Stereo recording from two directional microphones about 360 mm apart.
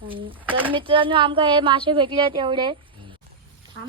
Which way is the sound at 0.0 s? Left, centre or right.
Centre.